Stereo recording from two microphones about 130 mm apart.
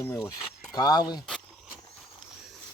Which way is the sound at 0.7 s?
30° left (ahead or behind).